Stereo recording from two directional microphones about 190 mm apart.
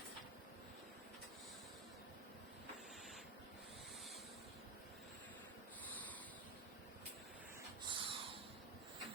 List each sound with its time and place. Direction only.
7.9 s snort: 25° right (ahead or behind)